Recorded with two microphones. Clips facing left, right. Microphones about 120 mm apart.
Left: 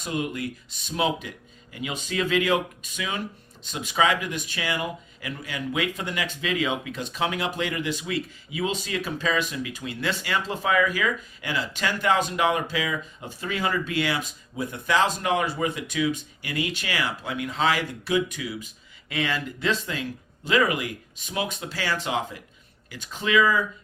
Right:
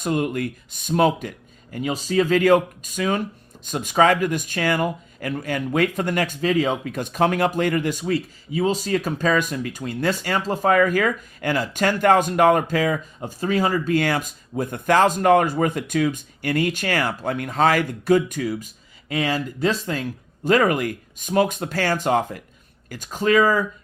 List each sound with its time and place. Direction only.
0.0 s speech: 50° right (ahead or behind)